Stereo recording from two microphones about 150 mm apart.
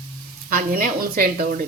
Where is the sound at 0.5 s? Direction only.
70° right (ahead or behind).